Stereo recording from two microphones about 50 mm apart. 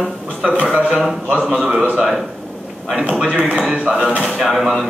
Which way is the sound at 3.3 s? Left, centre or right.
Right.